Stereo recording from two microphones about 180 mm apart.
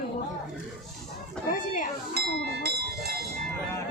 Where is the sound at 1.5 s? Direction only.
45° left (ahead or behind).